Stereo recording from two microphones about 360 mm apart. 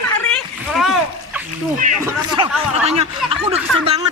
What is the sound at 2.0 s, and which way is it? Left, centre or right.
Speech, centre.